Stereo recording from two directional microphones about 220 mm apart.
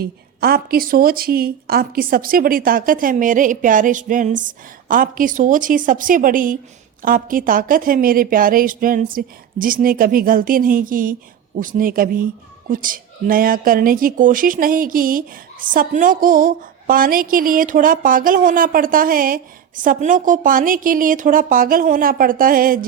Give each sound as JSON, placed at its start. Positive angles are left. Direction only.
{"t": 0.0, "sound": "a woman's voice", "side_deg": -45}